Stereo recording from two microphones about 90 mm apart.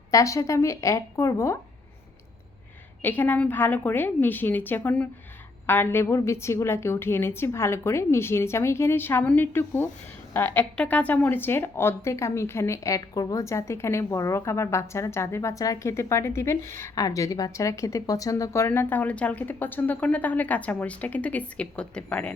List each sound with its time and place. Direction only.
0.1 s a woman's voice: 35° left (ahead or behind)
3.0 s a woman's voice: 20° left (ahead or behind)
16.9 s speech: 40° left (ahead or behind); by 22.3 s 10° left (ahead or behind)